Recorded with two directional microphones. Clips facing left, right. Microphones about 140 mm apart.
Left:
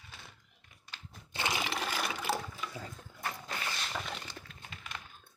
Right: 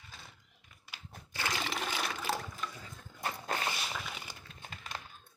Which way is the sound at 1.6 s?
Centre (ahead or behind).